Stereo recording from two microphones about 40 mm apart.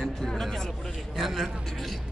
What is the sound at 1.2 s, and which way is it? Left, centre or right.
Speech, centre.